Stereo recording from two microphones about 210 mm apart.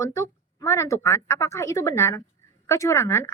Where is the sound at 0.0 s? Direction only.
15° left (ahead or behind).